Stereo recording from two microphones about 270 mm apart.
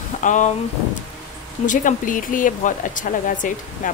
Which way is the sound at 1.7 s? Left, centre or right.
Left.